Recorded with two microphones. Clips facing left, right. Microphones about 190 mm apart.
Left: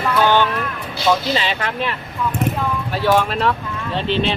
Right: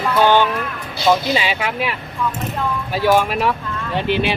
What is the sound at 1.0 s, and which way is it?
Speech, 10° right (ahead or behind).